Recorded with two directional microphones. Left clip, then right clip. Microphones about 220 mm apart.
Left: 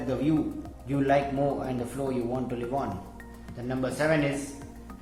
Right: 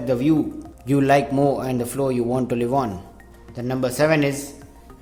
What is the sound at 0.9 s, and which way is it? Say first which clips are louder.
Speech: right 7 dB; 50° right (ahead or behind).